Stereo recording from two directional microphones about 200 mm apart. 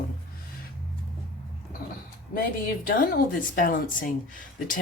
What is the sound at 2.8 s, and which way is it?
Speech, 45° left (ahead or behind).